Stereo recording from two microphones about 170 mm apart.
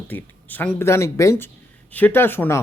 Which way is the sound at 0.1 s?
10° left (ahead or behind).